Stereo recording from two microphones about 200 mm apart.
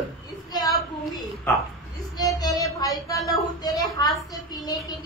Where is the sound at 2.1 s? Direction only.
20° left (ahead or behind).